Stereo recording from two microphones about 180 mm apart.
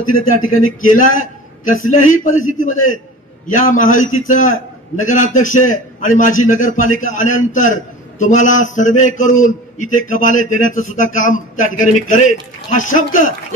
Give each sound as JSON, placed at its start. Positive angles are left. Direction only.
{"t": 0.0, "sound": "a man's voice", "side_deg": 45}